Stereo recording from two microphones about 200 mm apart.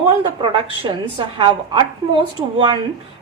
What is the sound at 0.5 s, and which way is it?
A woman's voice, 25° right (ahead or behind).